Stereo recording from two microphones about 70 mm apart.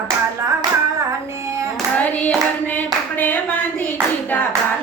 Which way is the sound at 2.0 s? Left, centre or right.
Left.